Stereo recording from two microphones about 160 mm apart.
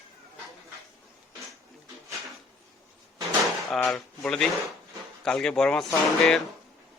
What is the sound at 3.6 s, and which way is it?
Speech, centre (ahead or behind).